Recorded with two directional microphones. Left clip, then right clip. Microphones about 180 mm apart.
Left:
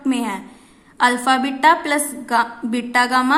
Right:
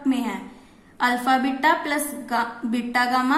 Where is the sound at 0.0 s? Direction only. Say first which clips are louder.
Left 3 dB; 25° left (ahead or behind).